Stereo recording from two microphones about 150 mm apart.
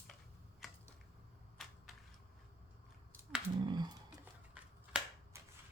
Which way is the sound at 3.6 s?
30° right (ahead or behind).